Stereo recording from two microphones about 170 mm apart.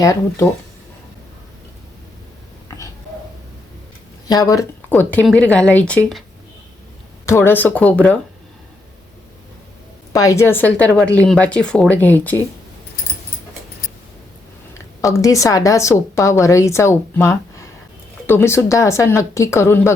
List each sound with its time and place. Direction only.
0.0 s speech: 20° left (ahead or behind)
2.6 s a sound: 20° left (ahead or behind)
4.3 s a woman's voice: 20° left (ahead or behind)
7.3 s a woman's voice: 15° left (ahead or behind)
10.1 s a woman's voice: 20° left (ahead or behind)
15.0 s a woman's voice: 20° left (ahead or behind)